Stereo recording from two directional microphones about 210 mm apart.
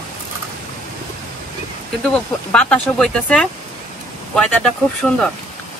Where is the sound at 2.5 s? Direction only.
5° left (ahead or behind).